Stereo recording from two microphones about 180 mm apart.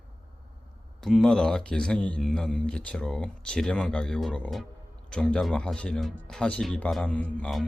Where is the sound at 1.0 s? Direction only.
Centre (ahead or behind).